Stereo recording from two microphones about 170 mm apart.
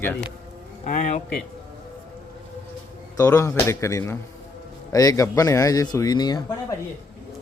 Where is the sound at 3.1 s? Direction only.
20° left (ahead or behind).